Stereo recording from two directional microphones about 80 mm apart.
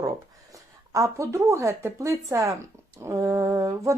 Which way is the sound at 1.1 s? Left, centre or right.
Right.